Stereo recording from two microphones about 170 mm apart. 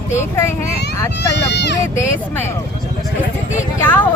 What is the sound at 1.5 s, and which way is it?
Vehicle, 90° left.